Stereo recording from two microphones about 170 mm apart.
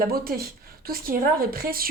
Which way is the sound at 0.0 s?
60° right (ahead or behind).